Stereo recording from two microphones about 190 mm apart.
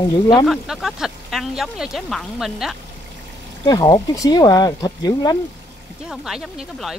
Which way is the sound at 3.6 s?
20° left (ahead or behind).